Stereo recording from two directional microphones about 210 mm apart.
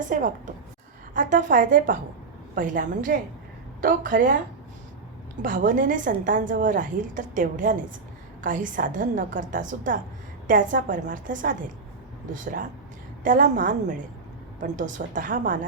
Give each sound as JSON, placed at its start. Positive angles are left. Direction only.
{"t": 0.1, "sound": "a woman's voice", "side_deg": -40}
{"t": 5.4, "sound": "a woman's voice", "side_deg": -40}